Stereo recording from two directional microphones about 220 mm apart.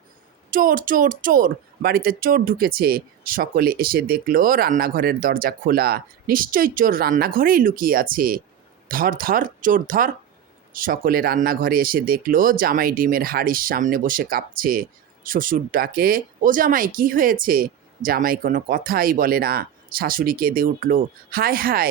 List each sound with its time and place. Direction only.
0.5 s speech: 40° right (ahead or behind)